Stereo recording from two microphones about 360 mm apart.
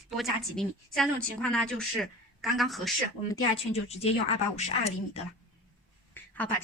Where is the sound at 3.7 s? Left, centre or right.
Centre.